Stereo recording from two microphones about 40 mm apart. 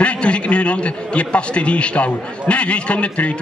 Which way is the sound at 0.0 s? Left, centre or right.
Left.